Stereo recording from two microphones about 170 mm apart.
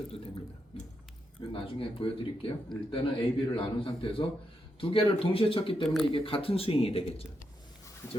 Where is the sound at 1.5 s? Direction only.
30° left (ahead or behind).